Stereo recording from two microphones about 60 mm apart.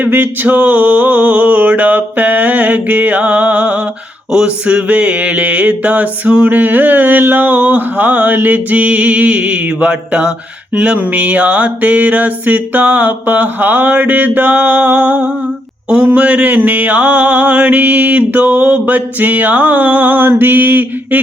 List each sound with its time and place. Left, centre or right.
0.0 s mantra: right